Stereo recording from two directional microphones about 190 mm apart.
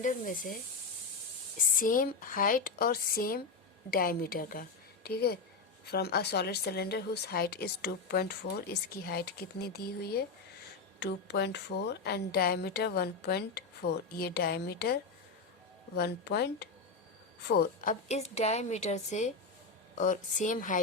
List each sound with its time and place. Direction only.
0.0 s speech: 45° left (ahead or behind)
1.7 s speech: 45° left (ahead or behind)
16.0 s a woman's voice: 60° left (ahead or behind); by 20.7 s 40° left (ahead or behind)